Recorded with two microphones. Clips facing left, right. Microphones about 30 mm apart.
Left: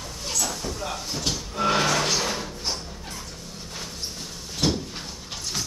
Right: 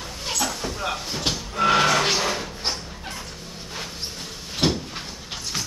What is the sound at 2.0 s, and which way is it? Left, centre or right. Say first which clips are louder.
Music: right 3 dB; right.